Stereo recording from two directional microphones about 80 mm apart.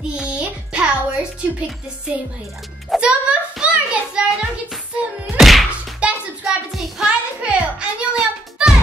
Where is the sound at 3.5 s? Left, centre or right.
Centre.